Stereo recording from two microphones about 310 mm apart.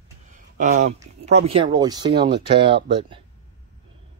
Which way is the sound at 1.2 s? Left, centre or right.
Centre.